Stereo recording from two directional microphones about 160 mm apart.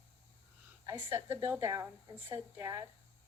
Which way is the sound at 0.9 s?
15° right (ahead or behind).